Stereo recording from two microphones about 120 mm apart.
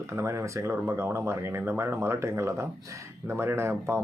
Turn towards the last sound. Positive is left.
turn(degrees=-20)  # may be behind; listen again after turning